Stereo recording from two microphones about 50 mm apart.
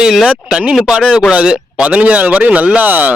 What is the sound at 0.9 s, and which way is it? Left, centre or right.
A man's voice, centre.